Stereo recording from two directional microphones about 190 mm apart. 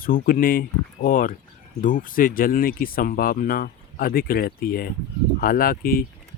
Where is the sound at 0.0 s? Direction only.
45° left (ahead or behind).